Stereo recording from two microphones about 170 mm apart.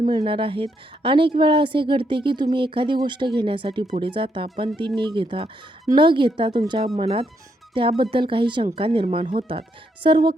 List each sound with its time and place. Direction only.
0.1 s a woman's voice: 30° right (ahead or behind)